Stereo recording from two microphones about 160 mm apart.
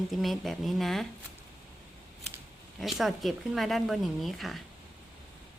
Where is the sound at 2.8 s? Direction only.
Centre (ahead or behind).